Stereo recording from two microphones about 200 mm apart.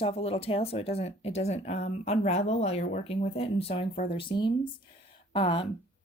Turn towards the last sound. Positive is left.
turn(degrees=25)  # may be behind; listen again after turning